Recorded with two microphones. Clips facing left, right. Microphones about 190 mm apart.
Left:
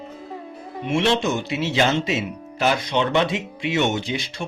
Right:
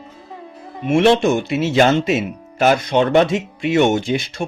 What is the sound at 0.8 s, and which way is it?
Speech, 55° right (ahead or behind).